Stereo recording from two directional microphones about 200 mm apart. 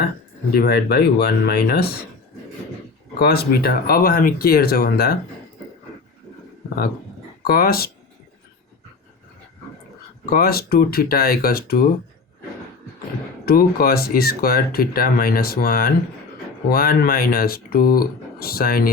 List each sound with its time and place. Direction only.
0.5 s speech: 50° left (ahead or behind)
3.2 s speech: 55° left (ahead or behind)
7.4 s speech: 50° left (ahead or behind)
10.2 s speech: 50° left (ahead or behind)
13.4 s speech: 50° left (ahead or behind)